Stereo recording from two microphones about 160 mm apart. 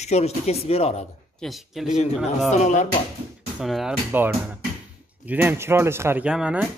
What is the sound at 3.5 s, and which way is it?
Speech, centre (ahead or behind).